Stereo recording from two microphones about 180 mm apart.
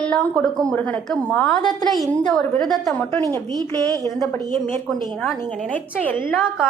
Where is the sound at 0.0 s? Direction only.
5° left (ahead or behind).